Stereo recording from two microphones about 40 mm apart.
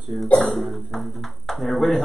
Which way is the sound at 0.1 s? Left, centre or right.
Right.